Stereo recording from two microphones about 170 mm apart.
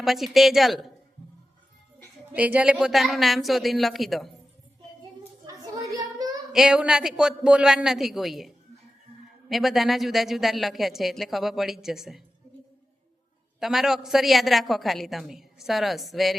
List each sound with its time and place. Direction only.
0.0 s a woman's voice: centre (ahead or behind)
2.3 s speech: 10° right (ahead or behind)
5.5 s a sound: 20° right (ahead or behind)
6.5 s speech: 5° right (ahead or behind)
9.5 s speech: centre (ahead or behind)
13.6 s speech: centre (ahead or behind)